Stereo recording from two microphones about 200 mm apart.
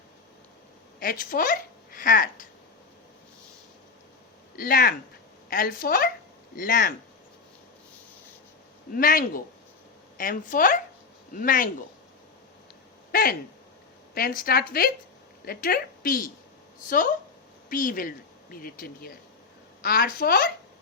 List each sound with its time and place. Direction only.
0.9 s speech: 45° left (ahead or behind)
4.5 s a woman's voice: 45° left (ahead or behind)
8.9 s a woman's voice: 45° left (ahead or behind)
13.1 s a sound: 50° left (ahead or behind)
14.1 s a woman's voice: 45° left (ahead or behind)
17.7 s a woman's voice: 45° left (ahead or behind)